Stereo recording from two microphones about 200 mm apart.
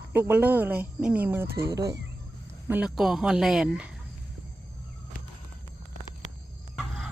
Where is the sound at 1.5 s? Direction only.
50° right (ahead or behind).